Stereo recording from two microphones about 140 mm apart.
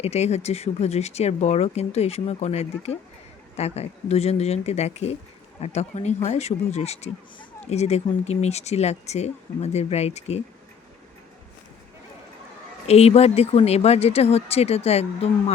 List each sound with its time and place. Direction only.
0.0 s speech: 50° left (ahead or behind)
12.9 s speech: 50° left (ahead or behind)